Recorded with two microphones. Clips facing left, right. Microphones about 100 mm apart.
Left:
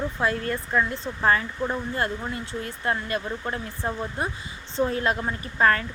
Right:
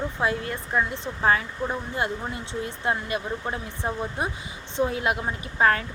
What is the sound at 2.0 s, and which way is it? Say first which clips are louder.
Speech: even; 15° right (ahead or behind).